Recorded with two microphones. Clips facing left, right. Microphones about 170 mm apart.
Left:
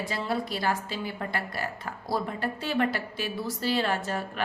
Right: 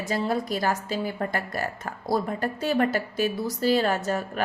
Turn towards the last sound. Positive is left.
turn(degrees=-40)  # may be behind; listen again after turning